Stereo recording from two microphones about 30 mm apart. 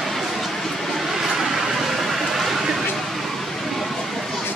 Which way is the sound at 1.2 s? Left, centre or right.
Centre.